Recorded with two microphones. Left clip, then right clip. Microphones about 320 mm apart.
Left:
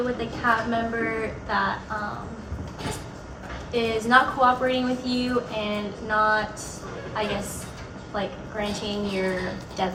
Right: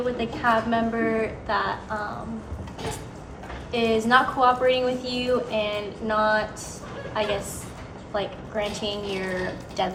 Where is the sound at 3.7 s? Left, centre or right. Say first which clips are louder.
Right 1 dB; right.